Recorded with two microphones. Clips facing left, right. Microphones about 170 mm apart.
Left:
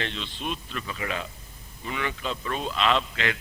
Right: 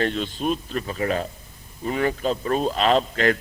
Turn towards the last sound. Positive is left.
turn(degrees=-40)  # may be behind; listen again after turning